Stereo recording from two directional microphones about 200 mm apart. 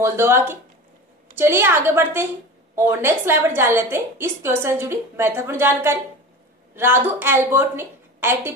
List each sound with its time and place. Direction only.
0.0 s a woman's voice: 10° right (ahead or behind)